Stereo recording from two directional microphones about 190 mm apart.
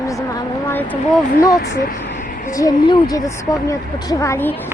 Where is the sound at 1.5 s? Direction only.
50° left (ahead or behind).